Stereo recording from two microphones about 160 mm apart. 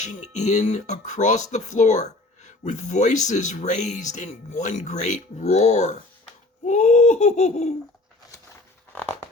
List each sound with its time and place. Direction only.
0.0 s speech: 45° left (ahead or behind)